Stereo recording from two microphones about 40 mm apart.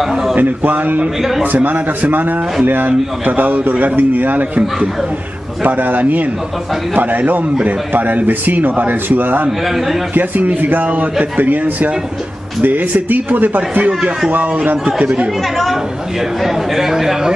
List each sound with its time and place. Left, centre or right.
0.0 s a man's voice: centre
0.4 s a man's voice: right
9.7 s a woman's voice: centre
10.1 s a man's voice: right
13.6 s speech: right
14.9 s speech: right
15.5 s a woman's voice: centre